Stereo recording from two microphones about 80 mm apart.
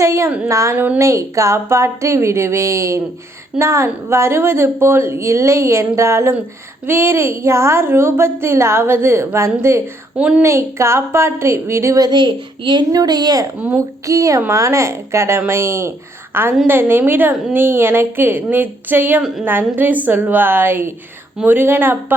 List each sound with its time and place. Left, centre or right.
0.0 s a woman's voice: right
10.2 s a woman's voice: centre
10.4 s a woman's voice: right
12.1 s a child's voice: right
12.9 s a woman's voice: right
13.7 s a woman's voice: right